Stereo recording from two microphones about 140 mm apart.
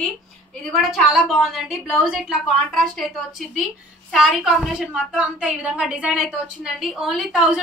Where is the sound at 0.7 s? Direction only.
Centre (ahead or behind).